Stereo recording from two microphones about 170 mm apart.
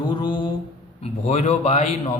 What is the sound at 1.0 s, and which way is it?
Speech, 40° left (ahead or behind).